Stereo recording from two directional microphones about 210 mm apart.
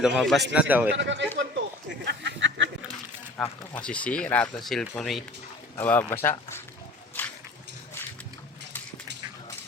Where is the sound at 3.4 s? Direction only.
5° left (ahead or behind).